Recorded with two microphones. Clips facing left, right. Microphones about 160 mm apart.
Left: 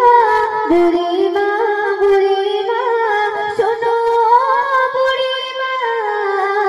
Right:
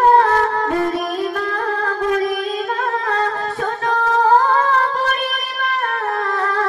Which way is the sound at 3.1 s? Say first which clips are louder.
Left 4 dB; 35° left (ahead or behind).